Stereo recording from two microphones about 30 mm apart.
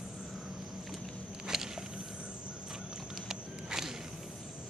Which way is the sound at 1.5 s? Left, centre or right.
Centre.